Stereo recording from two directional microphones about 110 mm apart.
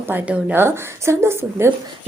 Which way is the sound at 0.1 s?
20° right (ahead or behind).